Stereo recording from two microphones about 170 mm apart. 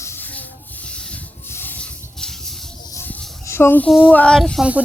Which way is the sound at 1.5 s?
10° left (ahead or behind).